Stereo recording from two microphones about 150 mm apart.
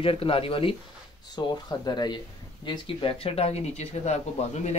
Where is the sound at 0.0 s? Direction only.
40° left (ahead or behind).